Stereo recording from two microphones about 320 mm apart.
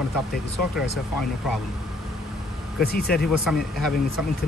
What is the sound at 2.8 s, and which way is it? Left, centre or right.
Speech, left.